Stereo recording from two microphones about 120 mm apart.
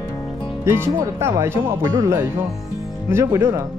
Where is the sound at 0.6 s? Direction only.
20° right (ahead or behind).